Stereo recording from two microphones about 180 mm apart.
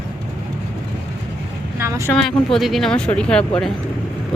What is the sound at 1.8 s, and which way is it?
Vehicle, 15° right (ahead or behind).